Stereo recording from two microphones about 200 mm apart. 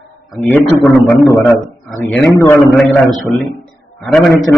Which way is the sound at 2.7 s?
Centre (ahead or behind).